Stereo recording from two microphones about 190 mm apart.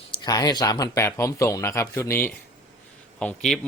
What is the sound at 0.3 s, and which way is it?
A man's voice, 20° left (ahead or behind).